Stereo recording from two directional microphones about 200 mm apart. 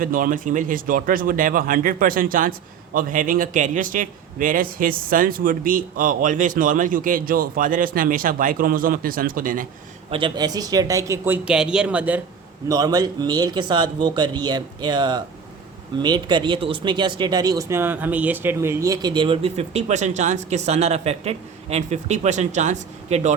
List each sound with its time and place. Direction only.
0.0 s speech: 45° right (ahead or behind)
10.1 s speech: 25° right (ahead or behind); by 12.2 s 5° right (ahead or behind)
12.6 s speech: 20° right (ahead or behind); by 23.3 s 35° right (ahead or behind)